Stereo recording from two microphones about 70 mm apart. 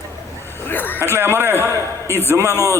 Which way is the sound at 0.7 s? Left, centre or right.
Left.